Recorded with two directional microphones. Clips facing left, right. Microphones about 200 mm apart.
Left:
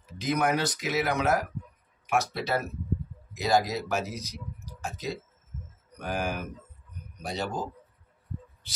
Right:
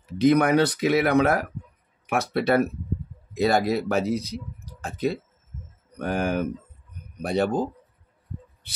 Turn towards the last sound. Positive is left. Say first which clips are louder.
# right 9 dB
turn(degrees=-60)  # may be behind; listen again after turning